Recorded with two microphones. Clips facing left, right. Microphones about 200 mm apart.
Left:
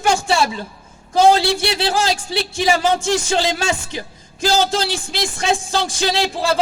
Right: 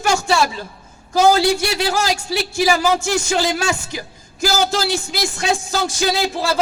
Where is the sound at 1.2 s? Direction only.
30° left (ahead or behind).